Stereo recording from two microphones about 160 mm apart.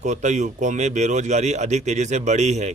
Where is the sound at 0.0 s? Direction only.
45° right (ahead or behind).